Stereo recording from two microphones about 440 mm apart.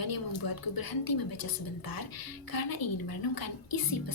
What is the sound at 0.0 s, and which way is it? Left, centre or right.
A woman's voice, left.